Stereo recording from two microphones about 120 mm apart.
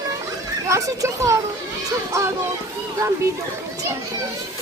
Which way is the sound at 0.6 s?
25° right (ahead or behind).